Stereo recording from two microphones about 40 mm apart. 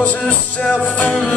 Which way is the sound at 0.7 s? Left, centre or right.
Left.